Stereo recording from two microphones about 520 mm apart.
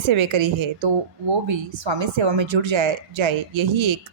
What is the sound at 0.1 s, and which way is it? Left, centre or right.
A woman's voice, right.